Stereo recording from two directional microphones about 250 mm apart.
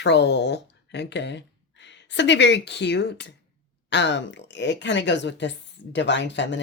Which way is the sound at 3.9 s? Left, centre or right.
Left.